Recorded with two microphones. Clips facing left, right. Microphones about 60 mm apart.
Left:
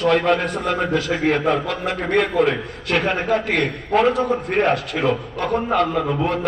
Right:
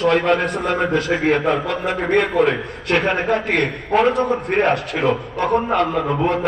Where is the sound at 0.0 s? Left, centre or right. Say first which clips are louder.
Right 1 dB; centre.